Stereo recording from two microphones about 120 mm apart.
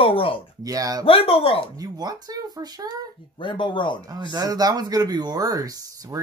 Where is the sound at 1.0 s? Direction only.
50° left (ahead or behind).